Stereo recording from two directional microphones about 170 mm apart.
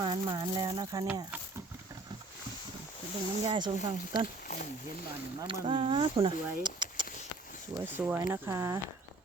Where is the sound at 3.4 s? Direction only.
30° right (ahead or behind).